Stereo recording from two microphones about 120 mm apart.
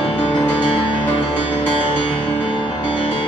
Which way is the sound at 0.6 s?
45° left (ahead or behind).